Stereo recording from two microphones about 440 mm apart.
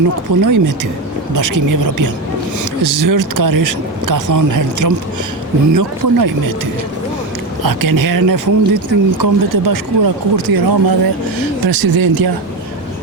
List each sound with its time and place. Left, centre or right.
0.4 s speech: right
7.6 s speech: right